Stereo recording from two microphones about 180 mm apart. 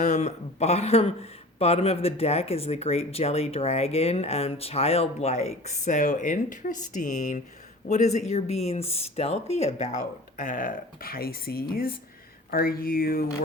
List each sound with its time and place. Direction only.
0.0 s speech: 40° left (ahead or behind)